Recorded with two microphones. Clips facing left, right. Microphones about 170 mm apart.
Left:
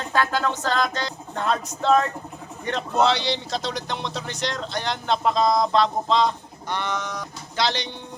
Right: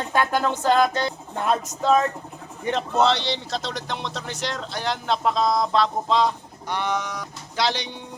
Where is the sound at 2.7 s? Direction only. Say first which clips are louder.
Right 1 dB; centre (ahead or behind).